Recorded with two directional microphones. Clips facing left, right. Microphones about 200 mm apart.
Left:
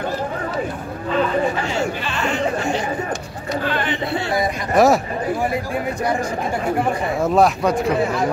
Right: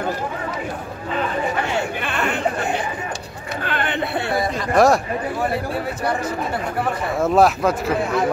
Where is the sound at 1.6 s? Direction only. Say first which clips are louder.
Left 1 dB; 60° right (ahead or behind).